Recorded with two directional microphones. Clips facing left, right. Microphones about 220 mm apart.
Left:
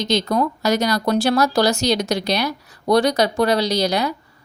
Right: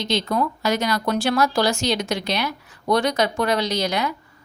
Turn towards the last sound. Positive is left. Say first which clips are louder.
# left 4 dB
turn(degrees=35)  # may be behind; listen again after turning